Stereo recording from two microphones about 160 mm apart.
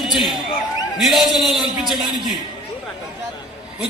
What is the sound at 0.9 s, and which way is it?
A man's voice, centre (ahead or behind).